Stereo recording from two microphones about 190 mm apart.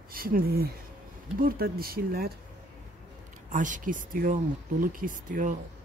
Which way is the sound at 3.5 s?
40° right (ahead or behind).